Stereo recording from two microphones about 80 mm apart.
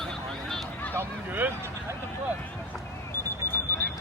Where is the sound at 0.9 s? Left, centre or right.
Right.